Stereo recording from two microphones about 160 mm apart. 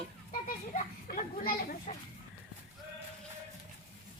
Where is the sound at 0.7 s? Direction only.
65° left (ahead or behind).